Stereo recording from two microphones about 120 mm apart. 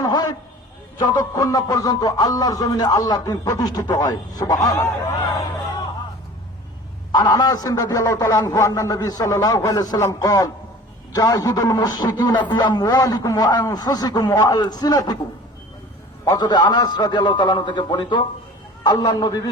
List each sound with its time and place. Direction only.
0.0 s a sound: 35° left (ahead or behind)
0.9 s a man's voice: 30° left (ahead or behind)
7.1 s a man's voice: 35° left (ahead or behind)
16.2 s a man's voice: 35° left (ahead or behind)